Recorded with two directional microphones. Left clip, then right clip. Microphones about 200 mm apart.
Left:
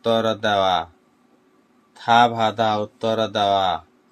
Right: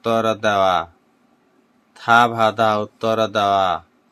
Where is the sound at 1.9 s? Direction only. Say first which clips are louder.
Right 1 dB; 15° right (ahead or behind).